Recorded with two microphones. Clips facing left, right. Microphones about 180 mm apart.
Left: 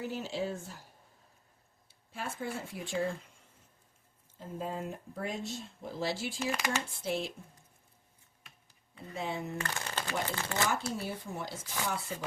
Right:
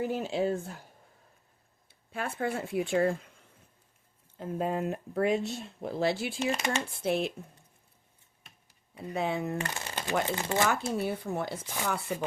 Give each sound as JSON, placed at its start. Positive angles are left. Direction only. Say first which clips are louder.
{"t": 0.0, "sound": "speech", "louder": "right 6 dB", "side_deg": -55}
{"t": 1.9, "sound": "speech", "louder": "right 5 dB", "side_deg": -60}
{"t": 4.4, "sound": "speech", "louder": "right 7 dB", "side_deg": -70}
{"t": 6.4, "sound": "speech", "louder": "right 4 dB", "side_deg": -25}
{"t": 6.9, "sound": "speech", "louder": "right 6 dB", "side_deg": -60}
{"t": 9.1, "sound": "speech", "louder": "right 6 dB", "side_deg": -60}
{"t": 9.6, "sound": "speech", "louder": "right 2 dB", "side_deg": -15}
{"t": 10.7, "sound": "speech", "louder": "right 5 dB", "side_deg": -60}